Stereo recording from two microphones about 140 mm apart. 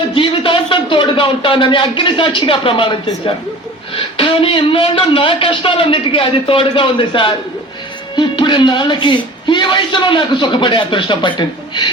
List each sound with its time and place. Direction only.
0.1 s speech: 35° left (ahead or behind)